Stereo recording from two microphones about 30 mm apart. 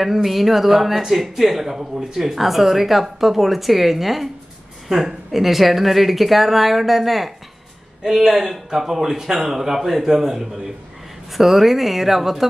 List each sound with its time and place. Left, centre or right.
0.0 s a man's voice: centre
1.8 s speech: right
2.1 s a man's voice: centre